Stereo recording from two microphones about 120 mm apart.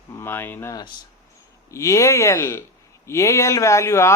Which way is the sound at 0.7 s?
40° left (ahead or behind).